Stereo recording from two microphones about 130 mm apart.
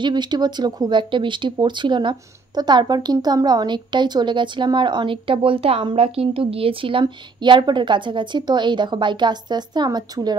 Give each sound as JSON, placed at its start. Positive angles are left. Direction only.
{"t": 0.0, "sound": "speech", "side_deg": -35}